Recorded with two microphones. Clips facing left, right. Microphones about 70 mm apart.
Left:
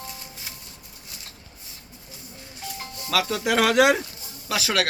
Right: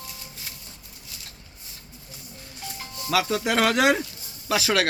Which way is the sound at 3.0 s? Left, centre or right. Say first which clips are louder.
Even; centre.